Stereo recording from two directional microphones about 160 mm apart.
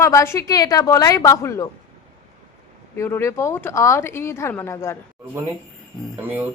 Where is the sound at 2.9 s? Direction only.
15° left (ahead or behind).